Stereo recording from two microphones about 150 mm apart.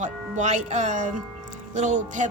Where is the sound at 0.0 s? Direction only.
55° right (ahead or behind).